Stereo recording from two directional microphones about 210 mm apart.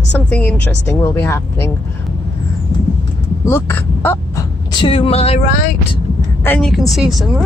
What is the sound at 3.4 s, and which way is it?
Speech, 10° left (ahead or behind).